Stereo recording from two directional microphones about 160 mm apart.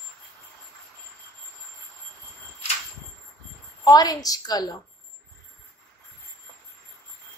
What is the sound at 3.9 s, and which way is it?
Speech, 25° left (ahead or behind).